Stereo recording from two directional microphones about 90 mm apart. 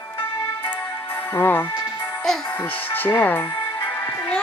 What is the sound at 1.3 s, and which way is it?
Speech, 25° left (ahead or behind).